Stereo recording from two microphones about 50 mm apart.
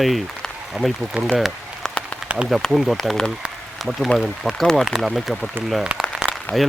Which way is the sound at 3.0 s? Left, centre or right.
Centre.